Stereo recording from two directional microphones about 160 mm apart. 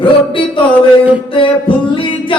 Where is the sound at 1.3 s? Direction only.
35° left (ahead or behind).